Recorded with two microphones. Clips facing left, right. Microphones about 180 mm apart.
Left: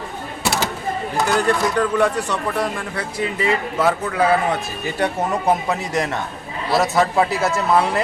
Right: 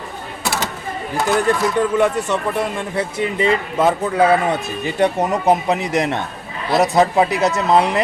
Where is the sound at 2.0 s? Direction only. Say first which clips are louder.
Right 2 dB; 25° right (ahead or behind).